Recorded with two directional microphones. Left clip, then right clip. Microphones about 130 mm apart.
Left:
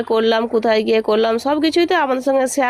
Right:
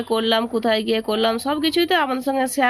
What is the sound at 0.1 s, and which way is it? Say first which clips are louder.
Speech: left 4 dB; 25° left (ahead or behind).